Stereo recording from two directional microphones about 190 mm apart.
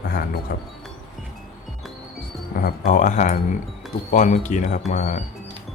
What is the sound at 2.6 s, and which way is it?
Speech, 45° left (ahead or behind).